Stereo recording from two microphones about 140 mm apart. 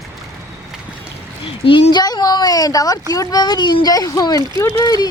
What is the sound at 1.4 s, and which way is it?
Speech, 40° left (ahead or behind).